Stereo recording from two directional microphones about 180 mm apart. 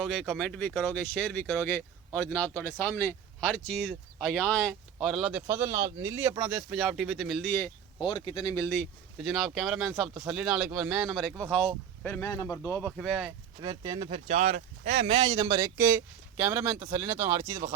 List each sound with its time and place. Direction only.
0.0 s speech: centre (ahead or behind)
8.0 s speech: 25° left (ahead or behind); by 8.9 s 10° left (ahead or behind)
9.1 s speech: centre (ahead or behind); by 12.9 s 15° left (ahead or behind)
13.0 s speech: centre (ahead or behind)
13.6 s speech: 25° right (ahead or behind)